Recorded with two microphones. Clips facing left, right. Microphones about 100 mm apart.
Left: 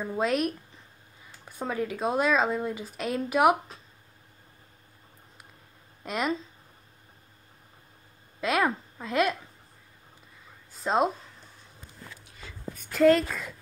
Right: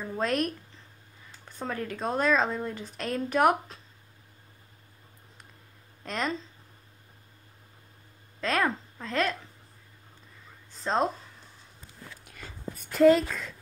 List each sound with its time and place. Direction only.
0.0 s speech: 15° left (ahead or behind)
1.4 s speech: 10° left (ahead or behind)
6.0 s speech: 10° left (ahead or behind)
8.4 s a woman's voice: 10° left (ahead or behind)
10.7 s a sound: 10° left (ahead or behind)
12.3 s a sound: 50° right (ahead or behind)
12.7 s a woman's voice: centre (ahead or behind)